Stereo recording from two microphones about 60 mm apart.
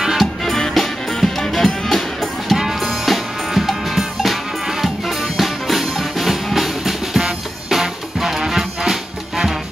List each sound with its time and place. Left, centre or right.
0.0 s music: centre
0.4 s music: centre